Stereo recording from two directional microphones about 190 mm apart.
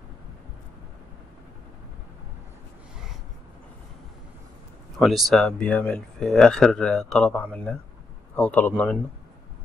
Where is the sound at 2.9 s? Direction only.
5° right (ahead or behind).